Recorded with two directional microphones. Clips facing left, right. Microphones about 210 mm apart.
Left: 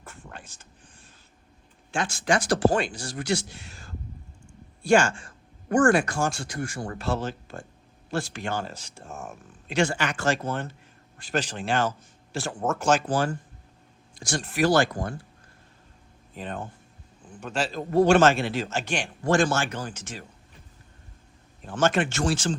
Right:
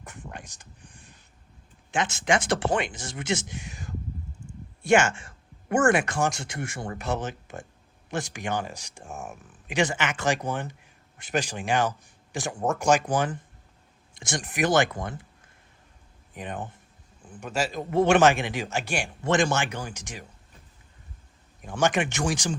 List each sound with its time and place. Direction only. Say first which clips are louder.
0.0 s a sound: right 3 dB; 15° right (ahead or behind)
1.9 s speech: even; 20° right (ahead or behind)
4.4 s a sound: right 7 dB; 5° right (ahead or behind)
4.8 s speech: left 1 dB; 20° right (ahead or behind)
16.3 s speech: even; 15° right (ahead or behind)
21.6 s speech: left 1 dB; 15° right (ahead or behind)